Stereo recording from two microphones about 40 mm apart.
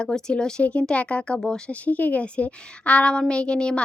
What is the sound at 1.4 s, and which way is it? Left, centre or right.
Speech, centre.